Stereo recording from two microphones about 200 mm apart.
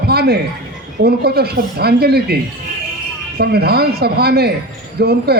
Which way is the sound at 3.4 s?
50° right (ahead or behind).